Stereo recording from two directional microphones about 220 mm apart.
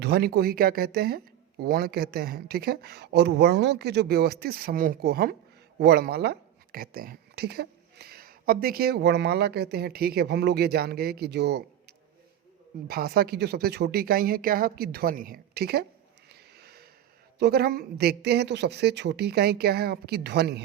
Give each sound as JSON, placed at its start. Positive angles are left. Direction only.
{"t": 0.0, "sound": "speech", "side_deg": -45}
{"t": 16.3, "sound": "a sound", "side_deg": -45}
{"t": 17.4, "sound": "speech", "side_deg": -45}